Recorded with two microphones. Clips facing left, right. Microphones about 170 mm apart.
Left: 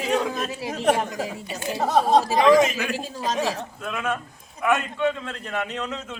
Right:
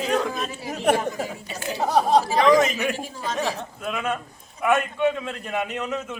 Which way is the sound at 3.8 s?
20° right (ahead or behind).